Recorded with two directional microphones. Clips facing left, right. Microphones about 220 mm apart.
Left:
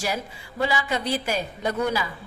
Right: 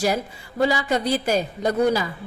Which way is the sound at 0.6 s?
40° right (ahead or behind).